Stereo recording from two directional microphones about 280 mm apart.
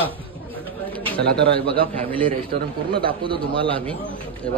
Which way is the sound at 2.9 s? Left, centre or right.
Centre.